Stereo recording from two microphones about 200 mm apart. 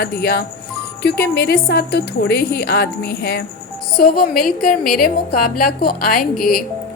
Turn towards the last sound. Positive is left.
turn(degrees=0)  # may be behind; listen again after turning